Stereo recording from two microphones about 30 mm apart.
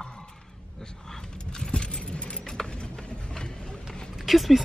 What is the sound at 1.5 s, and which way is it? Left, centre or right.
Vehicle, left.